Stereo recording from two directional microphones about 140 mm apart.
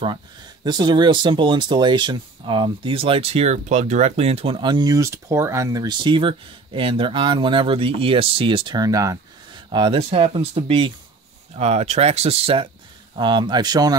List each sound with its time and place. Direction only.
0.7 s speech: 30° right (ahead or behind)
9.7 s speech: 35° right (ahead or behind)
13.1 s speech: 35° right (ahead or behind)